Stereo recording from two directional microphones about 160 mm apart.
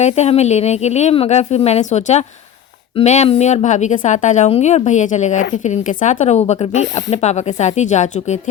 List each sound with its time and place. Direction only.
0.0 s a woman's voice: 45° left (ahead or behind)